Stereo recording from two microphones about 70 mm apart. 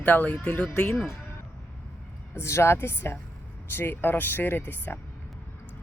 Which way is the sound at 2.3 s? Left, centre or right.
Left.